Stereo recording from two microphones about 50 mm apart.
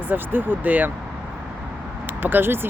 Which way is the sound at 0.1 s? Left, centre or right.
Right.